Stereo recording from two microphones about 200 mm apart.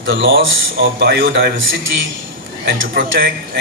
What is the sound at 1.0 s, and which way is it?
Speech, 55° right (ahead or behind).